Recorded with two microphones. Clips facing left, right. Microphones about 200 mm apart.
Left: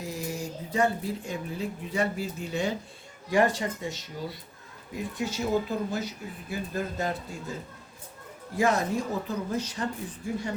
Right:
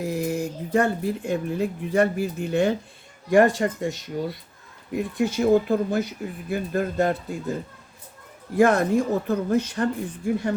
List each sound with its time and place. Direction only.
0.0 s speech: 55° right (ahead or behind)
8.5 s speech: 55° right (ahead or behind)